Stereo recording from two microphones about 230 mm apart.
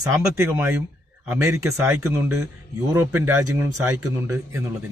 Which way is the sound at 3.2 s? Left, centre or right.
Right.